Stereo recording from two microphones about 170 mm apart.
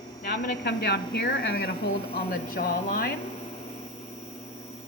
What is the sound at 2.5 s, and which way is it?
Speech, 60° left (ahead or behind).